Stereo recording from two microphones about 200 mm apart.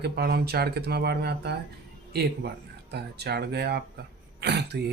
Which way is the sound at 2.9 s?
55° right (ahead or behind).